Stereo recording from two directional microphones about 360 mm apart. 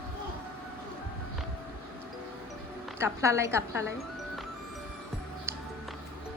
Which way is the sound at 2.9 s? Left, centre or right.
Centre.